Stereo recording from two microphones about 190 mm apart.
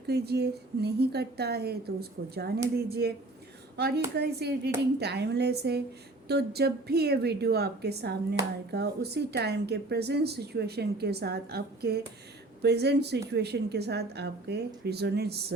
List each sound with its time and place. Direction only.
0.1 s speech: 60° right (ahead or behind)